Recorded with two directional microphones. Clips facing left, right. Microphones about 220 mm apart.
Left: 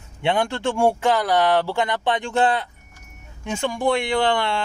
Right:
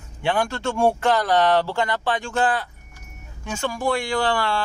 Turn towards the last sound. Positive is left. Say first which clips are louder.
# left 2 dB
turn(degrees=20)  # may be behind; listen again after turning